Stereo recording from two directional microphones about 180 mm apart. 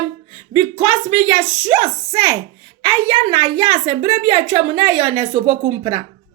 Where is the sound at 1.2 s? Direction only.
20° right (ahead or behind).